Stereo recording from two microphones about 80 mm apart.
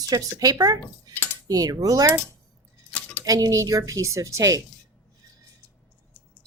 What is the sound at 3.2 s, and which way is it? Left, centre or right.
A woman's voice, right.